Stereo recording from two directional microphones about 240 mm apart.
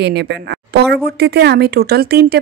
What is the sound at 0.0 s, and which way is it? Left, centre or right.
Speech, right.